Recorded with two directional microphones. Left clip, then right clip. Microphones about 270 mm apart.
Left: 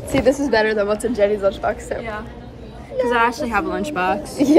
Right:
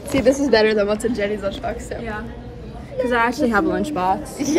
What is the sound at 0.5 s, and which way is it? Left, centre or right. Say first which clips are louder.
A woman's voice: right 1 dB; centre.